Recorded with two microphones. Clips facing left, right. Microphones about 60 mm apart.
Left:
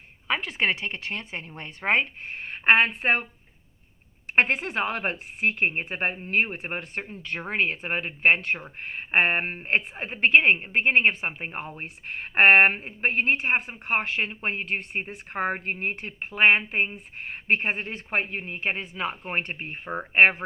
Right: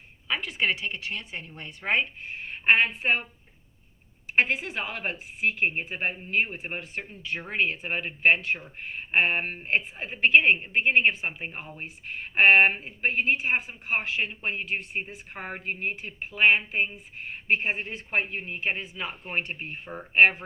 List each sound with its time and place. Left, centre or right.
0.3 s a woman's voice: left
4.4 s speech: left
9.6 s a woman's voice: left